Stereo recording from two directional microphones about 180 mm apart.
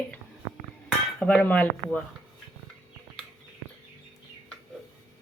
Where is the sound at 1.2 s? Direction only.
10° left (ahead or behind).